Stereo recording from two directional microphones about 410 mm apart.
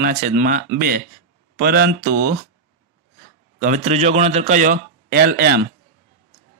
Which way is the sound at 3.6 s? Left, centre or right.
Centre.